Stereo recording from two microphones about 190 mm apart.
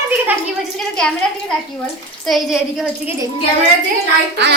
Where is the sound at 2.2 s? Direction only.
Centre (ahead or behind).